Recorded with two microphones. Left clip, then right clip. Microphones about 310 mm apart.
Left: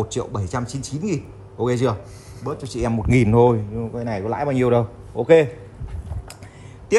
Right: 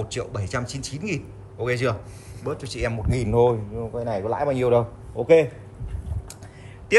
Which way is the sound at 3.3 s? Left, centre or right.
Left.